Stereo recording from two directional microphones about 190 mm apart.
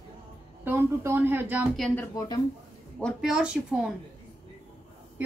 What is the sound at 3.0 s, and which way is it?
Speech, 5° right (ahead or behind).